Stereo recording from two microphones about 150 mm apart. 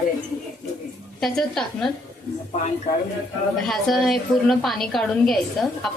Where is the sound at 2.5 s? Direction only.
50° left (ahead or behind).